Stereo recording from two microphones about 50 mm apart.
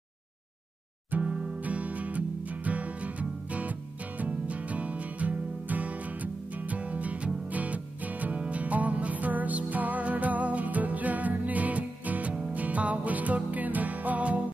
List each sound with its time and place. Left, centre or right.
1.2 s music: centre
1.6 s music: right